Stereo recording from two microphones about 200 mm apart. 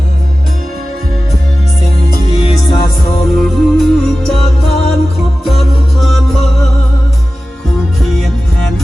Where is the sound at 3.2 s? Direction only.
Centre (ahead or behind).